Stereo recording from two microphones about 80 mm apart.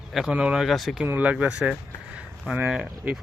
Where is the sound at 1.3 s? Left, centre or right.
Centre.